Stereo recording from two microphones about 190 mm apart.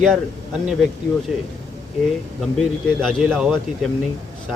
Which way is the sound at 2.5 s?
5° left (ahead or behind).